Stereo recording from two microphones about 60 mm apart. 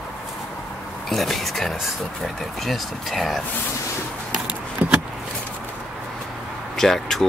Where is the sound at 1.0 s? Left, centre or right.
Centre.